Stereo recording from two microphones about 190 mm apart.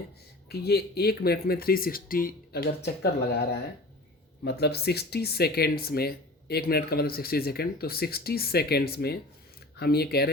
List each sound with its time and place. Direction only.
0.4 s speech: 55° left (ahead or behind)
4.4 s speech: 60° left (ahead or behind)